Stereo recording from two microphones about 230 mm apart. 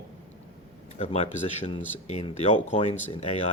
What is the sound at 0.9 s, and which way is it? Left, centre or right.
Speech, left.